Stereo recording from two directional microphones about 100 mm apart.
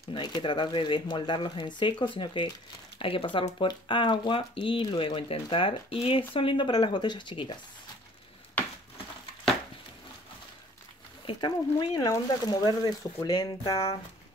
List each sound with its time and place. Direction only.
0.1 s speech: 50° left (ahead or behind)
11.2 s speech: 50° left (ahead or behind)